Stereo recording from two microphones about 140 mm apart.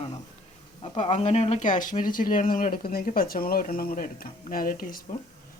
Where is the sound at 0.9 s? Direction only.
50° left (ahead or behind).